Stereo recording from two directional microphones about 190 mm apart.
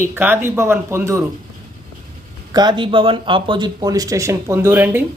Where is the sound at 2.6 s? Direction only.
25° right (ahead or behind).